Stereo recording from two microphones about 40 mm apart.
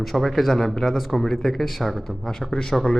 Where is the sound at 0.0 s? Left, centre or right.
Centre.